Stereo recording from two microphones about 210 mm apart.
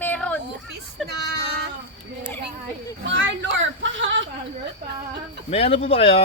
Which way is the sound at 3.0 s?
60° right (ahead or behind).